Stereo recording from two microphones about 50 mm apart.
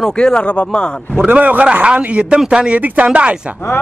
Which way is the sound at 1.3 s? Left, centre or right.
Right.